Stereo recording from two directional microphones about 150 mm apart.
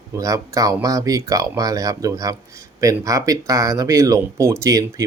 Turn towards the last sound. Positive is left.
turn(degrees=-20)  # may be behind; listen again after turning